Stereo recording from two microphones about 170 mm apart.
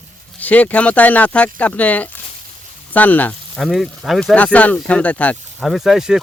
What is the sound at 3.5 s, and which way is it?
Speech, centre (ahead or behind).